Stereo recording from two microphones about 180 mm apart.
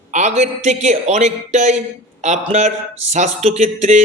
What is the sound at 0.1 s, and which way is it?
A man's voice, 40° right (ahead or behind).